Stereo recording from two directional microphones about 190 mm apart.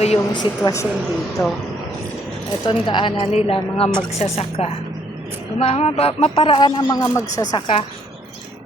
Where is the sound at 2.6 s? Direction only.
25° left (ahead or behind).